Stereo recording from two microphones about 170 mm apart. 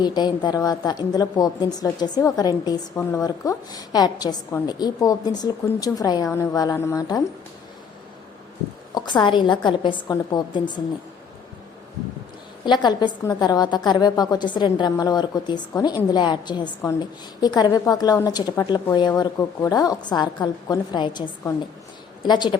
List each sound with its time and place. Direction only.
0.0 s a woman's voice: 25° left (ahead or behind)
9.0 s a woman's voice: 25° left (ahead or behind)
12.6 s a woman's voice: 25° left (ahead or behind)